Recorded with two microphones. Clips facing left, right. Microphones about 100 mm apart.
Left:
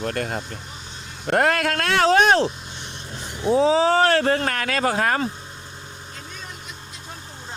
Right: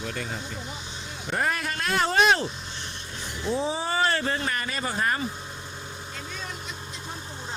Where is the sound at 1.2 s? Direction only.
75° left (ahead or behind).